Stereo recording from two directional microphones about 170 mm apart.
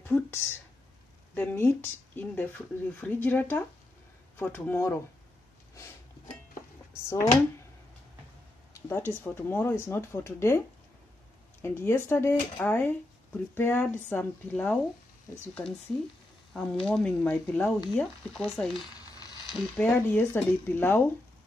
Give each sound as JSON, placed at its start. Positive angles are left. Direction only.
{"t": 0.0, "sound": "speech", "side_deg": 15}
{"t": 6.9, "sound": "a sound", "side_deg": 15}
{"t": 8.7, "sound": "speech", "side_deg": 15}
{"t": 11.6, "sound": "speech", "side_deg": 15}
{"t": 16.5, "sound": "speech", "side_deg": 5}